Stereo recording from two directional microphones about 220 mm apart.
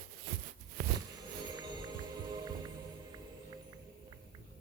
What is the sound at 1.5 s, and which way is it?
Music, 20° right (ahead or behind).